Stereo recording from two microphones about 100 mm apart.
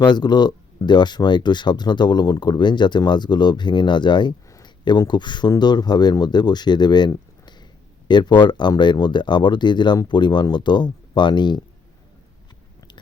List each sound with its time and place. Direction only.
0.0 s speech: 45° left (ahead or behind)